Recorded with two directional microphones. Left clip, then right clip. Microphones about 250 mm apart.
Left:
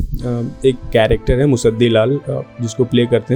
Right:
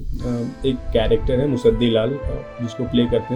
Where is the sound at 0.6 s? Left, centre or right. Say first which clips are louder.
Left 7 dB; left.